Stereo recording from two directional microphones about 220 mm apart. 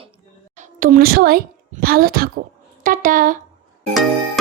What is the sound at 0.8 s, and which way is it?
A woman's voice, 40° right (ahead or behind).